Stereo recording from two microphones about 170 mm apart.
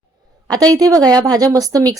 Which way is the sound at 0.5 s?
20° right (ahead or behind).